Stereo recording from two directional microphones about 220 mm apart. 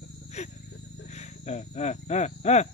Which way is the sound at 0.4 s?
30° left (ahead or behind).